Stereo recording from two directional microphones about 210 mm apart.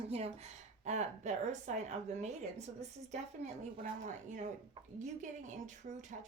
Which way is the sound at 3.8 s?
35° right (ahead or behind).